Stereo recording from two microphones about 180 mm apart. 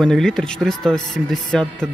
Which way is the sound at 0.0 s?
5° left (ahead or behind).